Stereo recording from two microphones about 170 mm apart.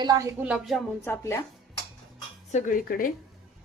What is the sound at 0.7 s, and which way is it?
Speech, 15° left (ahead or behind).